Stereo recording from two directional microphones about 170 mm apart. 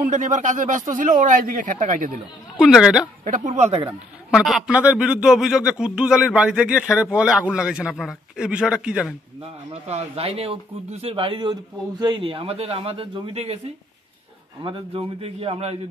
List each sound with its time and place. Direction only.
0.0 s speech: 50° right (ahead or behind)
2.6 s speech: 5° right (ahead or behind)
3.3 s speech: 45° right (ahead or behind)
4.3 s speech: centre (ahead or behind)
9.4 s speech: 35° right (ahead or behind)
14.6 s speech: 30° right (ahead or behind)